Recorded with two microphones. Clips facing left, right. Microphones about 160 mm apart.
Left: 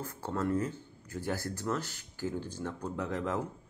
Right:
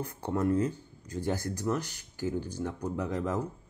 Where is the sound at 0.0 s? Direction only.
15° right (ahead or behind).